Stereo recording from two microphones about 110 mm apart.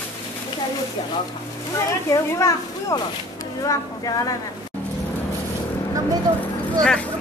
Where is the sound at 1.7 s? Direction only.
30° left (ahead or behind).